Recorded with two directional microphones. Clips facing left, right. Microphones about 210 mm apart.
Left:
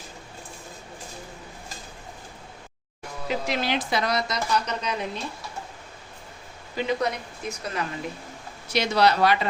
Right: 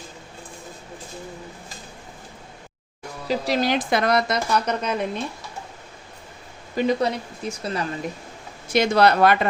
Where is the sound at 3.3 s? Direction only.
35° right (ahead or behind); by 5.1 s 55° right (ahead or behind).